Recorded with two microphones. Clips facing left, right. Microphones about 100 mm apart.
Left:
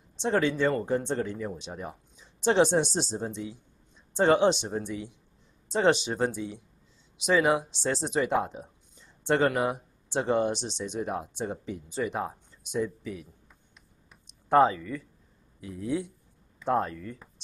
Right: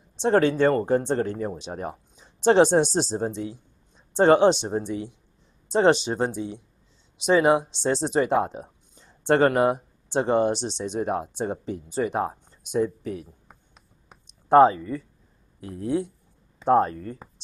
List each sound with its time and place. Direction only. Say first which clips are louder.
0.1 s speech: right 6 dB; 40° right (ahead or behind); by 8.1 s 25° right (ahead or behind)
8.1 s speech: right 4 dB; 35° right (ahead or behind)
8.5 s a sound: right 4 dB; 45° right (ahead or behind)
9.3 s speech: right 6 dB; 45° right (ahead or behind)
10.0 s speech: right 4 dB; 30° right (ahead or behind); by 13.6 s 50° right (ahead or behind)
14.5 s speech: right 6 dB; 35° right (ahead or behind)
15.6 s speech: right 4 dB; 45° right (ahead or behind)